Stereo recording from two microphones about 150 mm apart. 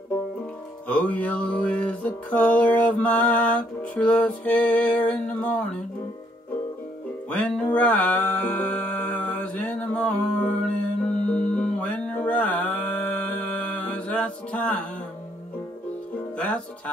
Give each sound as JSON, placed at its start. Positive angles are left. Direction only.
{"t": 0.8, "sound": "music", "side_deg": 10}
{"t": 7.2, "sound": "music", "side_deg": 5}
{"t": 16.3, "sound": "music", "side_deg": 10}